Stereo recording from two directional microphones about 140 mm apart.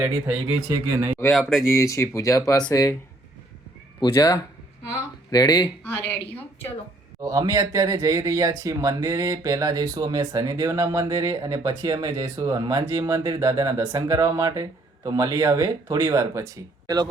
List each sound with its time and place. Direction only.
0.7 s speech: 20° right (ahead or behind)
1.3 s speech: centre (ahead or behind)
1.7 s speech: 20° left (ahead or behind)
4.0 s speech: 30° left (ahead or behind)
5.8 s a woman's voice: 15° left (ahead or behind)
7.2 s speech: 25° right (ahead or behind)